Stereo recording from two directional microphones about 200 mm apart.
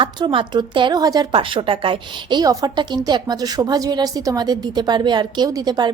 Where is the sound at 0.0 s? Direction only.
25° right (ahead or behind).